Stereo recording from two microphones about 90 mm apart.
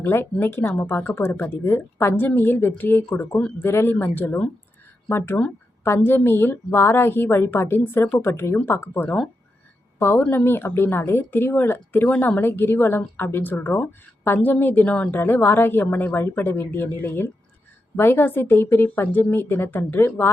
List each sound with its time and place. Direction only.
0.0 s a woman's voice: 25° left (ahead or behind)